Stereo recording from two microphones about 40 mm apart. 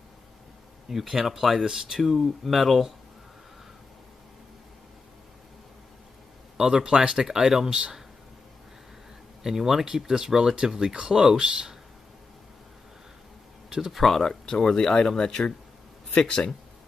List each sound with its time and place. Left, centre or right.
0.8 s speech: centre
6.5 s speech: centre
9.4 s speech: centre
13.7 s speech: centre
13.9 s speech: centre